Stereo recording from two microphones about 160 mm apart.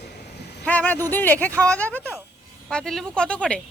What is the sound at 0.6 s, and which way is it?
A woman's voice, 10° left (ahead or behind).